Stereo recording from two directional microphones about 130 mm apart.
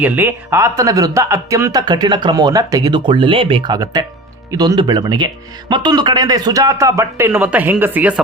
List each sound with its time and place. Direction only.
0.0 s a man's voice: 15° right (ahead or behind); by 3.7 s 45° right (ahead or behind)
3.7 s a man's voice: 30° right (ahead or behind); by 8.2 s 10° right (ahead or behind)